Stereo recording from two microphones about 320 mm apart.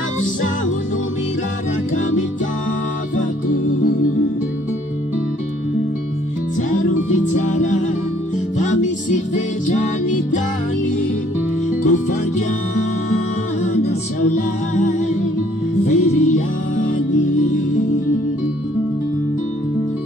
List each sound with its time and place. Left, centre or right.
7.1 s music: left
11.8 s music: left
14.7 s music: left